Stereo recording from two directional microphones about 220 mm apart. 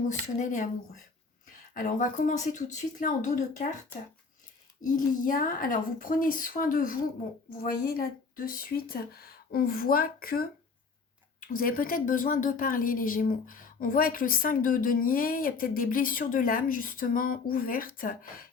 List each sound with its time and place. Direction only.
0.1 s a woman's voice: 35° left (ahead or behind)
1.7 s a woman's voice: 40° left (ahead or behind)
4.8 s a woman's voice: 40° left (ahead or behind)